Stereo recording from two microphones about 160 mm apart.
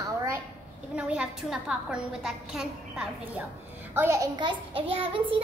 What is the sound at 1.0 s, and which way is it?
A woman's voice, 5° right (ahead or behind).